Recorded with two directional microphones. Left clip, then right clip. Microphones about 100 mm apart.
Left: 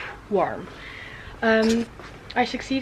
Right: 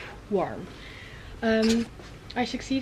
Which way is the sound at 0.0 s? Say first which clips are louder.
Left 5 dB; 20° left (ahead or behind).